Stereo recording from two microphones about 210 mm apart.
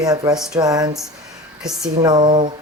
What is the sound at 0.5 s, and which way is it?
Speech, 20° right (ahead or behind).